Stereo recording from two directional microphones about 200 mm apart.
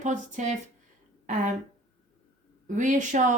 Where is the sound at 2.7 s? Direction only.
40° right (ahead or behind).